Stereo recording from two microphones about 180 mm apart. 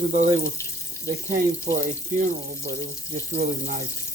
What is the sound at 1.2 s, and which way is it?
Speech, 40° right (ahead or behind).